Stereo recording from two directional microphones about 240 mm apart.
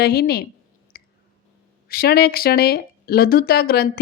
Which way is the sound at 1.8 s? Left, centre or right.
Left.